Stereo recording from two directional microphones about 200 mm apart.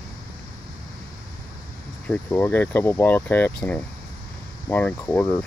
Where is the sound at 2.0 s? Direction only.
10° left (ahead or behind).